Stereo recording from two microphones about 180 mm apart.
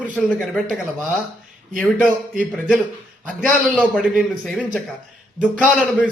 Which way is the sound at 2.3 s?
Centre (ahead or behind).